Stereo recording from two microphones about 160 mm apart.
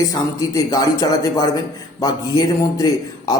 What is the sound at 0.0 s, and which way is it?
A man's voice, 20° left (ahead or behind).